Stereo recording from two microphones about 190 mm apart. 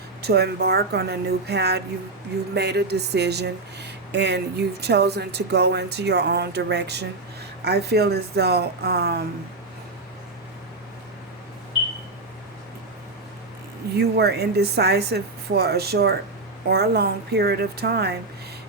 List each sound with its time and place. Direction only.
0.2 s speech: 60° right (ahead or behind)
13.9 s speech: 60° right (ahead or behind)